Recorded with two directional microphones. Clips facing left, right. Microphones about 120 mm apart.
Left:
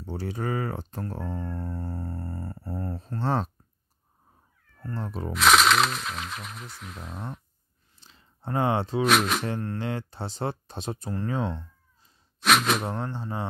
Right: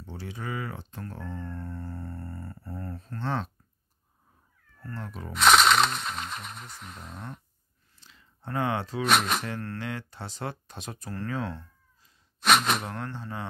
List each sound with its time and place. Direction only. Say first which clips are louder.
0.0 s speech: left 7 dB; 40° left (ahead or behind)
4.8 s speech: left 5 dB; 30° left (ahead or behind)
5.3 s whip: even; centre (ahead or behind)
8.0 s a sound: left 4 dB; 30° left (ahead or behind)
9.0 s whip: left 1 dB; centre (ahead or behind)
9.8 s speech: left 4 dB; 30° left (ahead or behind)
12.4 s speech: left 1 dB; centre (ahead or behind)
12.8 s speech: left 4 dB; 30° left (ahead or behind)